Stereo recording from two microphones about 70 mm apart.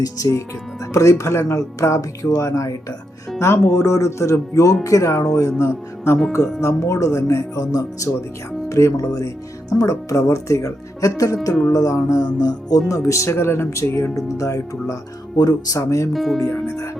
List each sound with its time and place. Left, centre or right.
0.0 s speech: left
9.1 s speech: left
12.2 s music: left
12.9 s speech: left
13.3 s speech: left
15.4 s music: left
15.8 s speech: left
16.1 s speech: centre